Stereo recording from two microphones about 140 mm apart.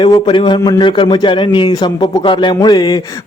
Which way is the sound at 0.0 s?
35° left (ahead or behind).